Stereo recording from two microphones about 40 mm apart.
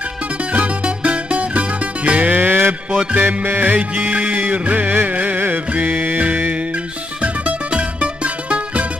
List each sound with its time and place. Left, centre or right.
0.4 s music: right
2.3 s mantra: right
2.9 s music: right
3.4 s music: right
6.5 s music: right